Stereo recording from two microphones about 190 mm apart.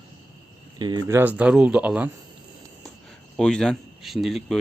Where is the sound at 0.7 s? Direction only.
25° right (ahead or behind).